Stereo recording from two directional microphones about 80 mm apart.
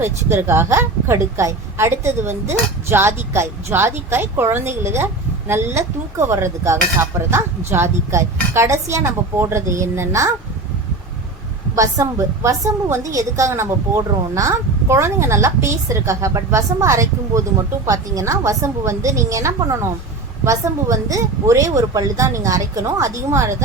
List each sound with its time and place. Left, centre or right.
0.0 s a woman's voice: right
11.7 s a woman's voice: right